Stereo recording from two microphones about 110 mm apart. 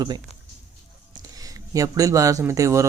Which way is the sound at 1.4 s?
30° right (ahead or behind).